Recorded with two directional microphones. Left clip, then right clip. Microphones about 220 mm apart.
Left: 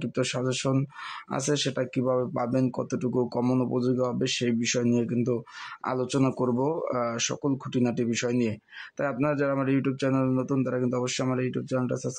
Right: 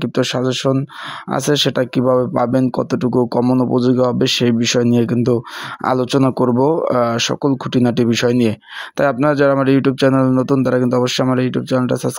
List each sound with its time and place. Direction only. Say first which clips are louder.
0.0 s speech: right 11 dB; 40° right (ahead or behind)